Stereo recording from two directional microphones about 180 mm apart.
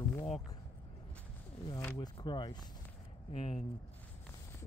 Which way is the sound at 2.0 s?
25° left (ahead or behind).